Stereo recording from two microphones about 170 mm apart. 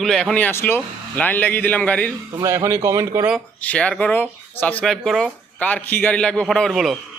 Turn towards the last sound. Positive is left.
turn(degrees=0)  # may be behind; listen again after turning